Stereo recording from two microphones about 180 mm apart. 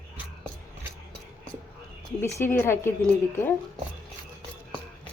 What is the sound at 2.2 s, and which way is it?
Speech, 10° left (ahead or behind).